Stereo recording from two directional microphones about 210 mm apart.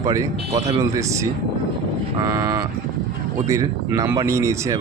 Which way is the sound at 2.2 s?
15° right (ahead or behind).